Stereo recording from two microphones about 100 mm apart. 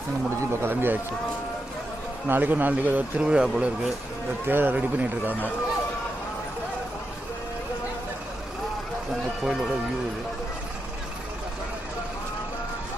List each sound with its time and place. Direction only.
0.5 s a man's voice: 25° right (ahead or behind)
2.2 s a man's voice: 20° right (ahead or behind)
4.4 s a man's voice: 20° right (ahead or behind)
9.4 s speech: 5° right (ahead or behind)